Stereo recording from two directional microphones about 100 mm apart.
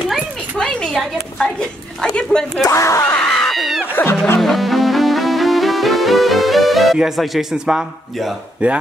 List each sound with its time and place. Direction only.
0.8 s a woman's voice: 5° left (ahead or behind)
2.6 s speech: 30° left (ahead or behind)
3.2 s a sound: 5° left (ahead or behind)
3.9 s speech: 20° left (ahead or behind)
4.4 s music: centre (ahead or behind)